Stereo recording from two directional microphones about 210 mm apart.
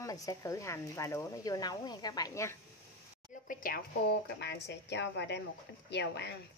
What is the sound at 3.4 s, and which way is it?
A woman's voice, 45° left (ahead or behind).